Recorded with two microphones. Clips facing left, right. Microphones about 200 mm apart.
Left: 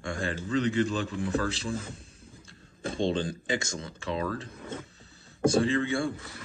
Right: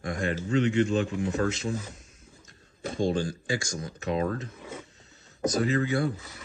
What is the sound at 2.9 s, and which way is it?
Speech, 25° left (ahead or behind).